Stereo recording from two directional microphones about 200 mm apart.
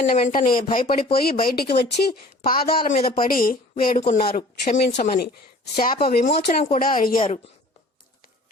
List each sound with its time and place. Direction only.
0.2 s speech: 40° left (ahead or behind)